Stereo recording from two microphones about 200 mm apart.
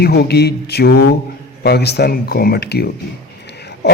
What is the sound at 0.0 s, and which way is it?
Speech, 55° left (ahead or behind).